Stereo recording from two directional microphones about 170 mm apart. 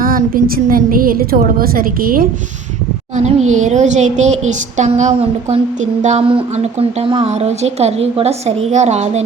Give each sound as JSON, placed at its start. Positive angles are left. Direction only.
{"t": 0.0, "sound": "a woman's voice", "side_deg": -55}
{"t": 3.2, "sound": "speech", "side_deg": -40}